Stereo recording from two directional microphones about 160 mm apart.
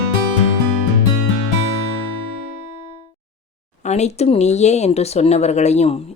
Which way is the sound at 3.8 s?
45° left (ahead or behind).